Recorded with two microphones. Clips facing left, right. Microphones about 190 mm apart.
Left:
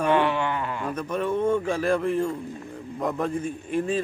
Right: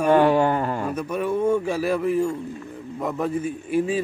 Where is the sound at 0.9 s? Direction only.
10° right (ahead or behind).